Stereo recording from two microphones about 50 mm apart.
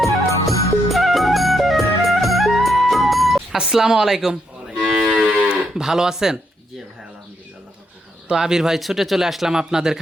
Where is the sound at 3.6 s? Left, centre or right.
Centre.